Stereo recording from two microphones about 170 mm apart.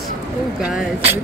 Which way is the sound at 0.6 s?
5° right (ahead or behind).